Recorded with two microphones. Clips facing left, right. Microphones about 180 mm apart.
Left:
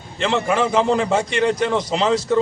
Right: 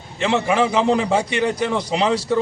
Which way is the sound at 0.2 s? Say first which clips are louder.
Right 1 dB; 10° right (ahead or behind).